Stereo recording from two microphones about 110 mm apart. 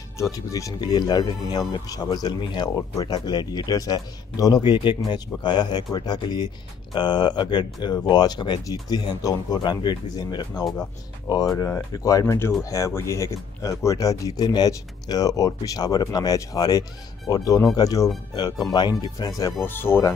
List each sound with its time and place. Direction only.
0.2 s speech: 30° left (ahead or behind)
19.6 s speech: 20° left (ahead or behind)